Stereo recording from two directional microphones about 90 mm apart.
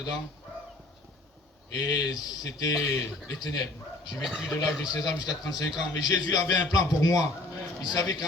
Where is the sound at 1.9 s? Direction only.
45° left (ahead or behind).